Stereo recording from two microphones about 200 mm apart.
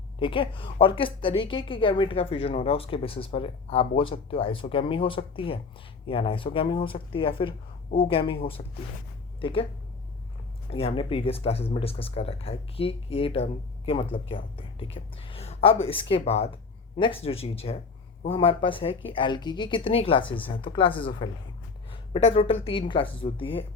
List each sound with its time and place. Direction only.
0.2 s a woman's voice: 25° left (ahead or behind)
10.7 s a woman's voice: 30° left (ahead or behind)
20.2 s speech: 10° left (ahead or behind)
21.2 s a woman's voice: 20° left (ahead or behind)
21.8 s a sound: 25° left (ahead or behind)
22.6 s a woman's voice: 25° left (ahead or behind)